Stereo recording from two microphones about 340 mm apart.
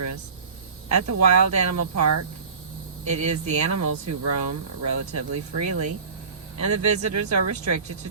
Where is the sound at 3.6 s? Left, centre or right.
Right.